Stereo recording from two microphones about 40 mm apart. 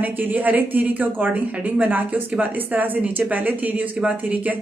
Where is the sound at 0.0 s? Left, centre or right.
Right.